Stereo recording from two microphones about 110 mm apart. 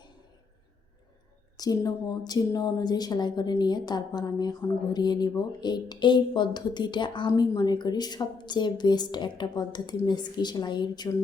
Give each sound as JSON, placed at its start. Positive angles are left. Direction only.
{"t": 1.5, "sound": "a woman's voice", "side_deg": 35}
{"t": 7.3, "sound": "a woman's voice", "side_deg": 35}